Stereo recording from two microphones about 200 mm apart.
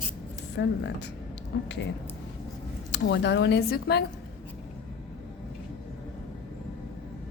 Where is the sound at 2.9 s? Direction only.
60° left (ahead or behind).